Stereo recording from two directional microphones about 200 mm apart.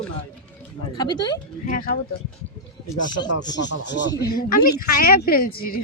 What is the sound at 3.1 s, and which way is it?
Speech, 65° left (ahead or behind).